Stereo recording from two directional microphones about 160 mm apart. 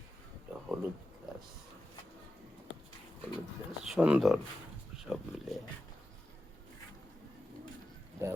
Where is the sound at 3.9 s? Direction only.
5° right (ahead or behind).